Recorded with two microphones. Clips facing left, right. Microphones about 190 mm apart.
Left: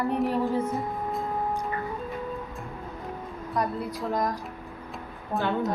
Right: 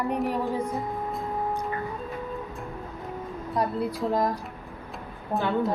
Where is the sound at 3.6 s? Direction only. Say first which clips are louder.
Right 2 dB; 25° right (ahead or behind).